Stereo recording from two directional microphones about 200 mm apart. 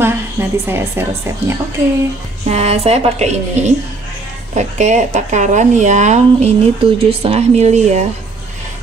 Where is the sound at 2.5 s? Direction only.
30° right (ahead or behind).